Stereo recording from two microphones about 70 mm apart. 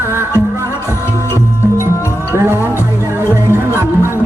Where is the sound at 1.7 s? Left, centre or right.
Left.